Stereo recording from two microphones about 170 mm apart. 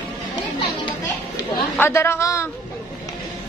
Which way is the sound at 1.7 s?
15° left (ahead or behind).